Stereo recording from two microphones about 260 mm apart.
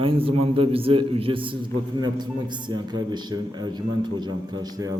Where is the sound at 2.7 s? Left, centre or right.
Centre.